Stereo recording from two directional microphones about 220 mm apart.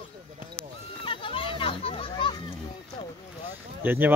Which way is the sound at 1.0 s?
25° left (ahead or behind).